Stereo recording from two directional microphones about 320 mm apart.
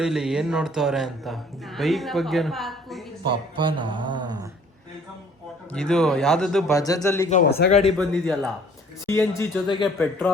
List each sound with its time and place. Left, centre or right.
0.0 s a man's voice: centre
3.2 s speech: centre
5.7 s a man's voice: centre
7.3 s speech: left
7.9 s a man's voice: centre